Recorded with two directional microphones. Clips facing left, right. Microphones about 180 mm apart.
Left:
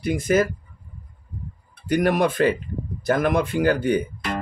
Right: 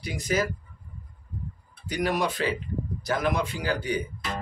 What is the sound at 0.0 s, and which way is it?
Speech, 50° left (ahead or behind).